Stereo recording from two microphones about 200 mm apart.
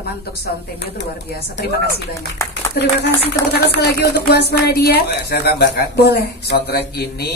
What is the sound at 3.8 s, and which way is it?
A woman's voice, 55° left (ahead or behind).